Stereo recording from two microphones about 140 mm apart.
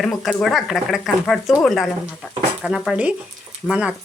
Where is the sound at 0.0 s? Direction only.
Centre (ahead or behind).